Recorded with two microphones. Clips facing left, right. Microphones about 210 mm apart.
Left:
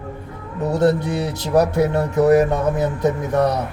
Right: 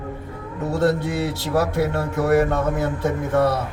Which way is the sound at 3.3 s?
15° left (ahead or behind).